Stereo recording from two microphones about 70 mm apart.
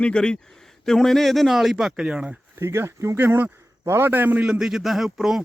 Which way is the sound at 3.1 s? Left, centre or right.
Right.